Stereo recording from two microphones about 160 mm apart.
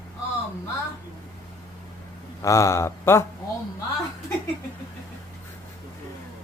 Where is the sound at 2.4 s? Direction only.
20° left (ahead or behind).